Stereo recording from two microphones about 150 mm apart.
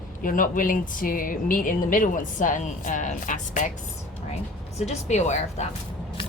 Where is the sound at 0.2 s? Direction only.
65° left (ahead or behind).